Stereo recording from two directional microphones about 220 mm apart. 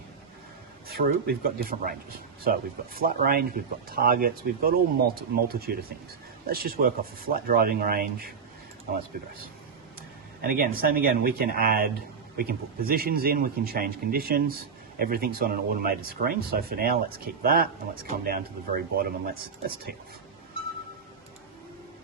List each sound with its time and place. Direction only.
0.9 s speech: 45° right (ahead or behind)
10.4 s speech: 40° right (ahead or behind)